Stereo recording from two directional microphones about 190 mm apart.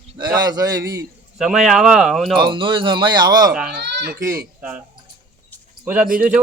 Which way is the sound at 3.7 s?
65° right (ahead or behind).